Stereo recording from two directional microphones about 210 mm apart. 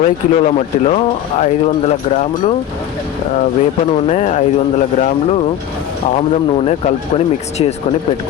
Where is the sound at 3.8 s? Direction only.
30° left (ahead or behind).